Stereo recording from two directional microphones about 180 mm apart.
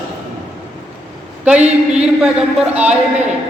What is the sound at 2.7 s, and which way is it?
Speech, 10° right (ahead or behind).